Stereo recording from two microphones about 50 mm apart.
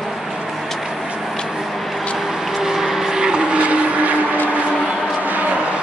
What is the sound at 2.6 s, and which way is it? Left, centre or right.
Vehicle, centre.